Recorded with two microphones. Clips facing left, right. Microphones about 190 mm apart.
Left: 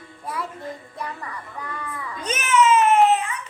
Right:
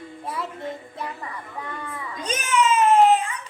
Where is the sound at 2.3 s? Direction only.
35° right (ahead or behind).